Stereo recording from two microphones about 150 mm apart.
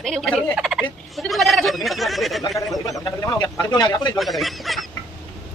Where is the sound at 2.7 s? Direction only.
25° left (ahead or behind).